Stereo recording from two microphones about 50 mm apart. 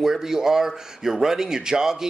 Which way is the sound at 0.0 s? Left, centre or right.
Centre.